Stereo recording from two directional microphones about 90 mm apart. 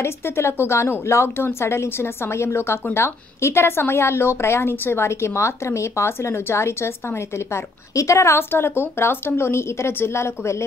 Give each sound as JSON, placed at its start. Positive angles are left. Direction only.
{"t": 0.0, "sound": "a woman's voice", "side_deg": 30}